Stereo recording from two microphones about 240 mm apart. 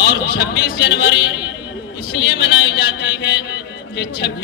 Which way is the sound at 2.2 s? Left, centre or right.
Left.